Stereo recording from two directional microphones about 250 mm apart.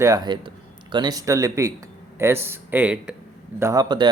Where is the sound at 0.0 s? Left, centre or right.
Centre.